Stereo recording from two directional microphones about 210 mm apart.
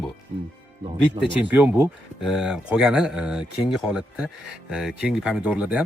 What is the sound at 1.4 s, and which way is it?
Speech, 5° right (ahead or behind).